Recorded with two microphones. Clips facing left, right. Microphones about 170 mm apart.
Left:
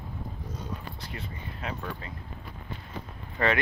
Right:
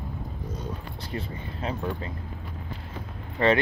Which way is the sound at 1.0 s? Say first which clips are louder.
Right 6 dB; 30° right (ahead or behind).